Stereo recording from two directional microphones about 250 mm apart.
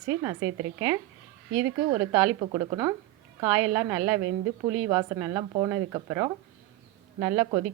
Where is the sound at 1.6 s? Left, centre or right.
Centre.